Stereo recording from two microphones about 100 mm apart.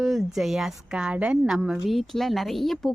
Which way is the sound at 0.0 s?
5° right (ahead or behind).